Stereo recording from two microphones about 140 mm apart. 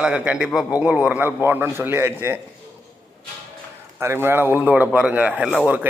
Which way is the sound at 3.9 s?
15° right (ahead or behind).